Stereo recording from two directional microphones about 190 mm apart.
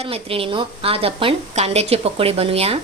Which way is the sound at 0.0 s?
30° right (ahead or behind).